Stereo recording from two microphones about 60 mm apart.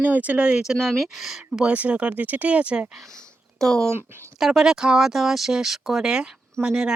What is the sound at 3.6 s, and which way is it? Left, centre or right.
Speech, centre.